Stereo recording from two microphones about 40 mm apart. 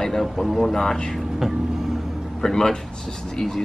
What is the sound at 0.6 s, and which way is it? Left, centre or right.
Speech, centre.